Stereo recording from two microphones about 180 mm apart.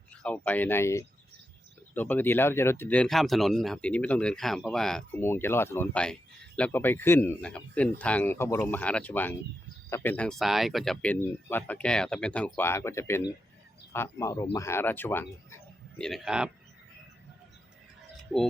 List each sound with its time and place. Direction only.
0.2 s speech: 10° left (ahead or behind)
5.2 s speech: 15° left (ahead or behind)
16.0 s speech: centre (ahead or behind)
18.3 s speech: 5° right (ahead or behind)